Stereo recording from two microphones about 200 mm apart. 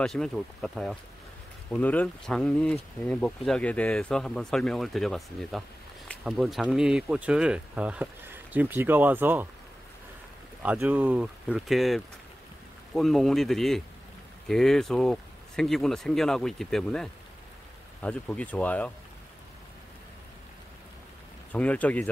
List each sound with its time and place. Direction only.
0.0 s speech: 5° left (ahead or behind)
10.6 s speech: 10° right (ahead or behind)
21.5 s speech: 5° left (ahead or behind)